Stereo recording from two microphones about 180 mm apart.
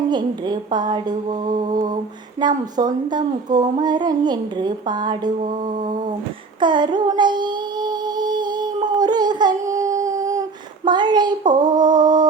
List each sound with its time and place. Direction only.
0.1 s speech: 25° right (ahead or behind)
2.4 s speech: 25° right (ahead or behind)
5.4 s mantra: 45° right (ahead or behind)
6.6 s child singing: 25° right (ahead or behind)
10.8 s speech: 25° right (ahead or behind)